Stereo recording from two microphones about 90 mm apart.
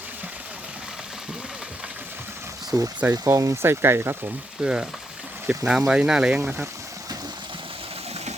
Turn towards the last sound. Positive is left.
turn(degrees=-10)  # may be behind; listen again after turning